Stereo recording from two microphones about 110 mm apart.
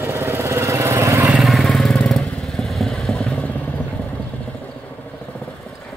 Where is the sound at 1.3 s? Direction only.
Centre (ahead or behind).